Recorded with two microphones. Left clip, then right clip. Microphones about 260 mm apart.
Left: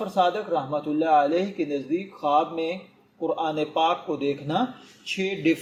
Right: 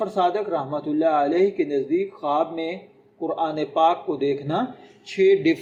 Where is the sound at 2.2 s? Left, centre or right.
Centre.